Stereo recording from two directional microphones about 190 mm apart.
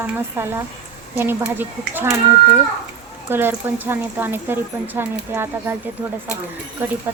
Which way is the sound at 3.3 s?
10° right (ahead or behind).